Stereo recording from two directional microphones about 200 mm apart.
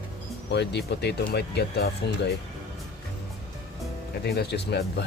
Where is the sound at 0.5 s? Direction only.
60° left (ahead or behind).